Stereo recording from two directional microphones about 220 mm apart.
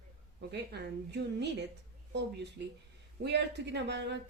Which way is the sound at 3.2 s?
50° right (ahead or behind).